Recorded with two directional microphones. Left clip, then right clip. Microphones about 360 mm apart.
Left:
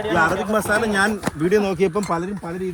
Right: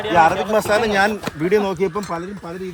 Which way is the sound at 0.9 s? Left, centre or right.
Centre.